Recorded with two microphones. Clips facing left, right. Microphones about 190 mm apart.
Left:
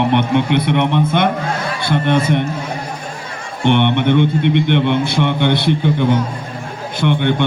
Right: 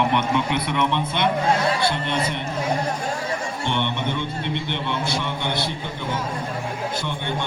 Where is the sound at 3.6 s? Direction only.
65° left (ahead or behind).